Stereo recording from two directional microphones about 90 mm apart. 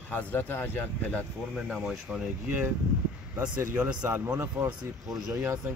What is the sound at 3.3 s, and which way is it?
Speech, 25° right (ahead or behind).